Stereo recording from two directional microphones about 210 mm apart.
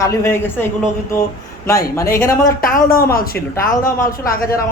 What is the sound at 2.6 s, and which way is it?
Speech, 45° left (ahead or behind).